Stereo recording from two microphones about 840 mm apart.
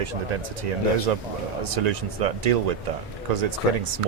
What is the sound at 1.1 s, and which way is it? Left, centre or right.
Speech, right.